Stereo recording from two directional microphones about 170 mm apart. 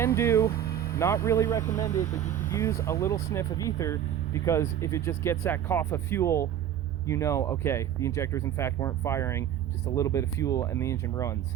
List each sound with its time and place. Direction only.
0.0 s speech: 15° left (ahead or behind)